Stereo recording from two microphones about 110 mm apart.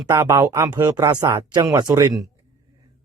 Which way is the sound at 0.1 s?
25° right (ahead or behind).